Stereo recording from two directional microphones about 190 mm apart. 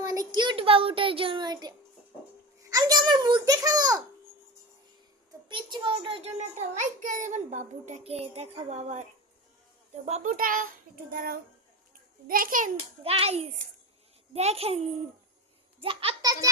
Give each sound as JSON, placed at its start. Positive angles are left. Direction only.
{"t": 0.0, "sound": "a sound", "side_deg": -20}
{"t": 0.3, "sound": "a child's voice", "side_deg": -25}
{"t": 5.5, "sound": "a child's voice", "side_deg": -25}
{"t": 6.7, "sound": "a child's voice", "side_deg": -40}
{"t": 13.1, "sound": "a child's voice", "side_deg": -30}